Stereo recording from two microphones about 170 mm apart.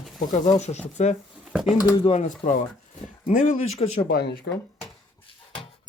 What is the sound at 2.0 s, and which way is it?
Speech, 40° left (ahead or behind).